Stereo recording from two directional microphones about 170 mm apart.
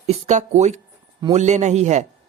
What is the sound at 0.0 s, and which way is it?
Speech, 40° right (ahead or behind).